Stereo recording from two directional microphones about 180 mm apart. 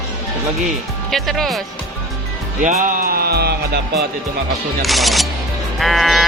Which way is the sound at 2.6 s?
45° right (ahead or behind).